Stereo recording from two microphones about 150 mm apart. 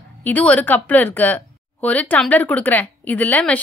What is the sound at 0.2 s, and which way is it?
A woman's voice, 10° left (ahead or behind).